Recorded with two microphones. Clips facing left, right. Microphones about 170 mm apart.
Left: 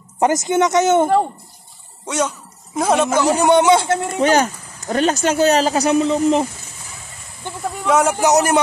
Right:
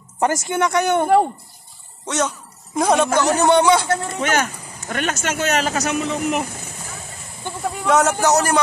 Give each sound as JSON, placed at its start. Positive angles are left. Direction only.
{"t": 0.2, "sound": "speech", "side_deg": 20}
{"t": 2.0, "sound": "speech", "side_deg": 10}
{"t": 4.2, "sound": "speech", "side_deg": 35}
{"t": 7.8, "sound": "speech", "side_deg": 10}